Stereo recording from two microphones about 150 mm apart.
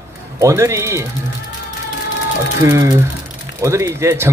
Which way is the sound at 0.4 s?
20° right (ahead or behind).